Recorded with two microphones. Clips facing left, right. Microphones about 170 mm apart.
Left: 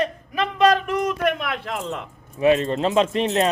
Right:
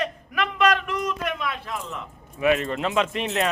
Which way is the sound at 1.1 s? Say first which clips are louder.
Left 6 dB; 60° left (ahead or behind).